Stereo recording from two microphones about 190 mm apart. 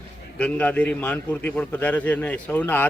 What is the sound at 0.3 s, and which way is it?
A man's voice, 5° left (ahead or behind).